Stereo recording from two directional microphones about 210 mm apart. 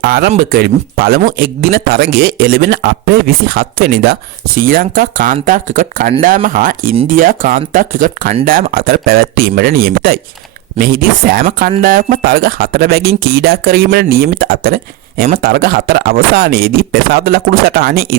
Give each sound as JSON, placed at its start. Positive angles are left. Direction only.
{"t": 0.0, "sound": "speech", "side_deg": -50}